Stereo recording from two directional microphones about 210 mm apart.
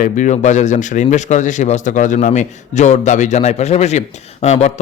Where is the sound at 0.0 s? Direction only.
35° left (ahead or behind).